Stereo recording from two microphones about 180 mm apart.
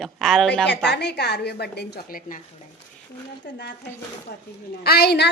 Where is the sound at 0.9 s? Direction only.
70° left (ahead or behind).